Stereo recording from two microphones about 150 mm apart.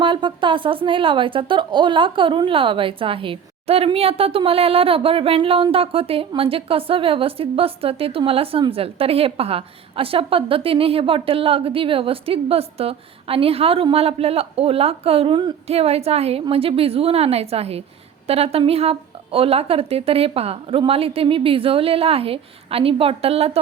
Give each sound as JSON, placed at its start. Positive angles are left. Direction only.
{"t": 0.0, "sound": "a woman's voice", "side_deg": -35}